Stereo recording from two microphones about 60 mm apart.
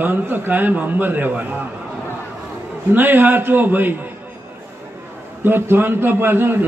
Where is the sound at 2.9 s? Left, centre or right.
Right.